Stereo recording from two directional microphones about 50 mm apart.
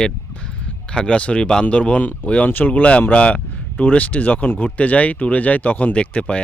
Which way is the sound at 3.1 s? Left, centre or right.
Left.